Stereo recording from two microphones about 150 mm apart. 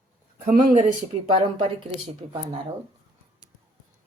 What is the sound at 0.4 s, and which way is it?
Speech, 55° right (ahead or behind).